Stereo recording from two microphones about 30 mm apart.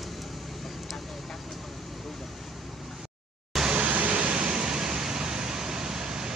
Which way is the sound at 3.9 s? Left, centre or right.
Right.